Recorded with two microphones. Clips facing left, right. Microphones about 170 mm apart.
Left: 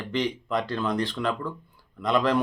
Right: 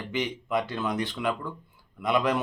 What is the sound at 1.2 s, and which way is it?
Speech, 15° right (ahead or behind).